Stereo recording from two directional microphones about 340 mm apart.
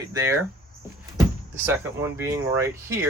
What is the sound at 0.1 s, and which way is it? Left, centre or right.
Speech, centre.